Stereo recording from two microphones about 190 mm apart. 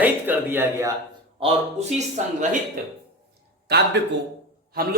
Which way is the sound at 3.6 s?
60° right (ahead or behind).